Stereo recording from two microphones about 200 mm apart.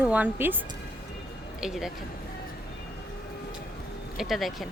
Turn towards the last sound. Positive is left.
turn(degrees=0)  # may be behind; listen again after turning